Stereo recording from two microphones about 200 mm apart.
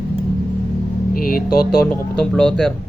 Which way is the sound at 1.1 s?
45° left (ahead or behind).